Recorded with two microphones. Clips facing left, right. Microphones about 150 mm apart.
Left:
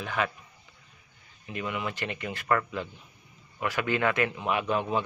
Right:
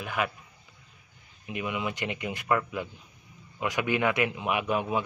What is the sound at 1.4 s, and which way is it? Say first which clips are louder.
A man's voice: right 1 dB; 15° right (ahead or behind).